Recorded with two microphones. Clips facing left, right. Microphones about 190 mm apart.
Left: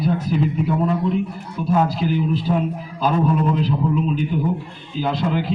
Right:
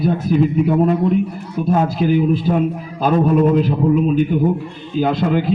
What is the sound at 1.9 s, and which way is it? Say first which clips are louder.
A man's voice: right 6 dB; 55° right (ahead or behind).